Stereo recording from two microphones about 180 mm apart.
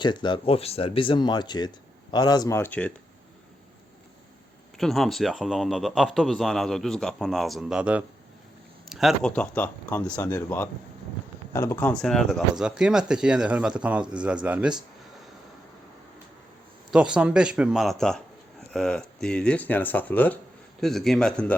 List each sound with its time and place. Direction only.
0.0 s speech: 25° left (ahead or behind); by 2.9 s 10° left (ahead or behind)
4.8 s speech: centre (ahead or behind)
16.9 s speech: 5° right (ahead or behind)